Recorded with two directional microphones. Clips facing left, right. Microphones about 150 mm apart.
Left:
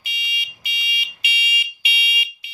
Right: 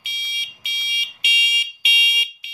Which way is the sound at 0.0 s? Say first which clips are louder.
Left 5 dB; 25° right (ahead or behind).